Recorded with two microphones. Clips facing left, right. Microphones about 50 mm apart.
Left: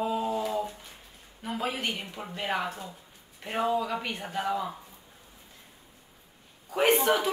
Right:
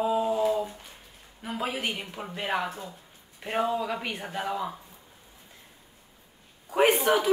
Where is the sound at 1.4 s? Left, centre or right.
Centre.